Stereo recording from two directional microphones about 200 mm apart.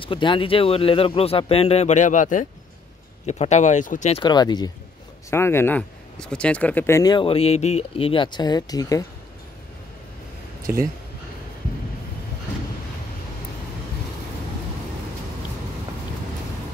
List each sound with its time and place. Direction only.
0.0 s speech: 25° left (ahead or behind)
4.2 s speech: 20° left (ahead or behind)